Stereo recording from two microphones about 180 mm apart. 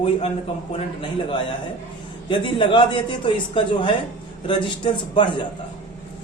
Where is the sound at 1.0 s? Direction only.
30° left (ahead or behind).